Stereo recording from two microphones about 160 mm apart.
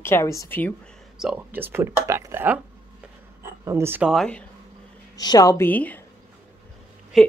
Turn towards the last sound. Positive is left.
turn(degrees=0)  # may be behind; listen again after turning